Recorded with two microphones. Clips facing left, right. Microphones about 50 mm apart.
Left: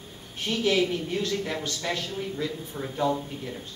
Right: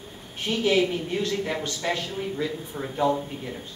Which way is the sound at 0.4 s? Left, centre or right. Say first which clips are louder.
Right 2 dB; centre.